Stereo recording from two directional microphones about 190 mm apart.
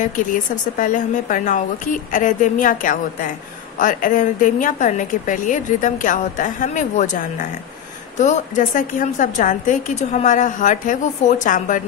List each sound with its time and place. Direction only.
0.0 s a woman's voice: 45° left (ahead or behind)